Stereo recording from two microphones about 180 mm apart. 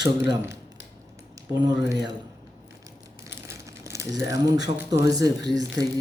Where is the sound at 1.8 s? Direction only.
20° right (ahead or behind).